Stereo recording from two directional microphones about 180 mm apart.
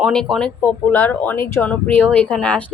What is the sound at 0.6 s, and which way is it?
A woman's voice, 10° left (ahead or behind).